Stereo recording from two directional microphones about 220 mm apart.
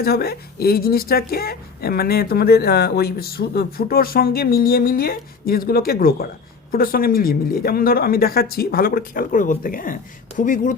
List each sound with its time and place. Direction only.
0.0 s speech: 45° left (ahead or behind)